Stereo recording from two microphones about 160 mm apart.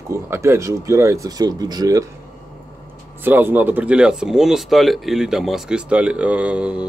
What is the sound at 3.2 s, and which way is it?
Speech, 10° right (ahead or behind).